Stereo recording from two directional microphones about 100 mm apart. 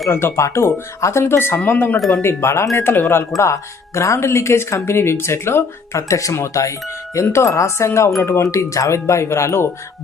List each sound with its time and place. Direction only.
0.1 s speech: 25° left (ahead or behind)